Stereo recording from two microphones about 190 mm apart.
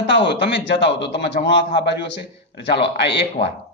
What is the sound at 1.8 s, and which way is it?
A man's voice, 65° left (ahead or behind).